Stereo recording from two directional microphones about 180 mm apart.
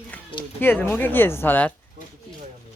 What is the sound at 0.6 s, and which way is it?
Speech, 10° left (ahead or behind).